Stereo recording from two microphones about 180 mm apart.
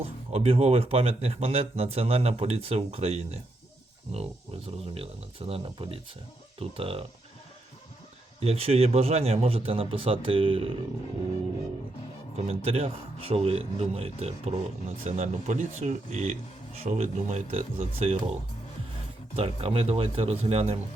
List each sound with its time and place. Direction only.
0.0 s a man's voice: 35° right (ahead or behind)
8.4 s a man's voice: 35° right (ahead or behind)
12.5 s a man's voice: 35° right (ahead or behind)
19.4 s a man's voice: 30° right (ahead or behind)